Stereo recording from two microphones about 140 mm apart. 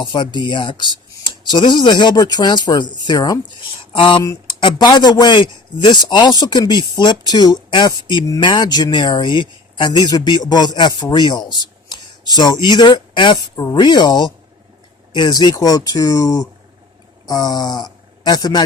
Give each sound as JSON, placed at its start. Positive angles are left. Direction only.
{"t": 0.0, "sound": "a man's voice", "side_deg": 35}